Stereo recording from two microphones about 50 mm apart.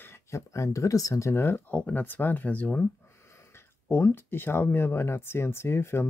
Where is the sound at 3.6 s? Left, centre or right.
Left.